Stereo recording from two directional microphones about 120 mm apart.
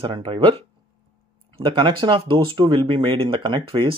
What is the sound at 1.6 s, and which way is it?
Speech, 40° right (ahead or behind).